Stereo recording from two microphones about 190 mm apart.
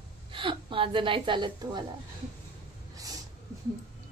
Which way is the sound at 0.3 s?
25° right (ahead or behind).